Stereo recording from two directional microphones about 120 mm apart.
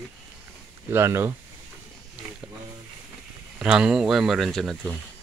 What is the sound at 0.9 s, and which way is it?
Speech, 20° right (ahead or behind).